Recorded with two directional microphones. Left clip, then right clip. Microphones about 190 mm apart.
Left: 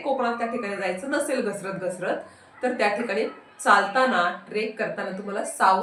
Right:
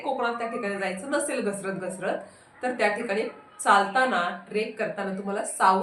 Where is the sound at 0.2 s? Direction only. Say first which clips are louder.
Left 2 dB; 20° right (ahead or behind).